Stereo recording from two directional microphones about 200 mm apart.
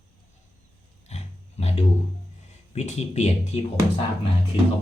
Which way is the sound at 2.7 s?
35° left (ahead or behind).